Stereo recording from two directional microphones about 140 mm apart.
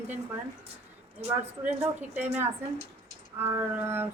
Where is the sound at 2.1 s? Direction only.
15° right (ahead or behind).